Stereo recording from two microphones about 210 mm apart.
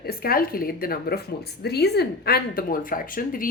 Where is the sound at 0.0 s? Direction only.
45° left (ahead or behind).